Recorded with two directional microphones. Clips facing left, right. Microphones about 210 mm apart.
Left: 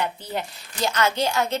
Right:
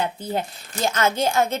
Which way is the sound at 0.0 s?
50° right (ahead or behind).